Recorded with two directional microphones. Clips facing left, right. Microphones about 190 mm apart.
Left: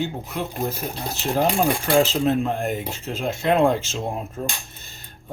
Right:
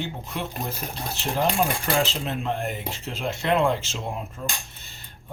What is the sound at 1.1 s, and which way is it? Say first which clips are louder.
Speech: left 3 dB; 45° left (ahead or behind).